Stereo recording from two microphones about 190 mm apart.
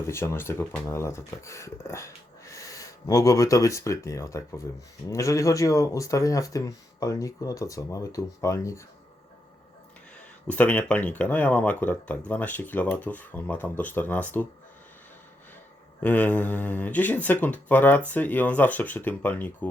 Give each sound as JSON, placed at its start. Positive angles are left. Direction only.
{"t": 0.1, "sound": "speech", "side_deg": 15}
{"t": 10.4, "sound": "speech", "side_deg": 5}
{"t": 16.0, "sound": "speech", "side_deg": 10}